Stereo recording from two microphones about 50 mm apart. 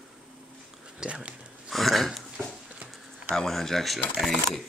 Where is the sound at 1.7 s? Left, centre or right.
Centre.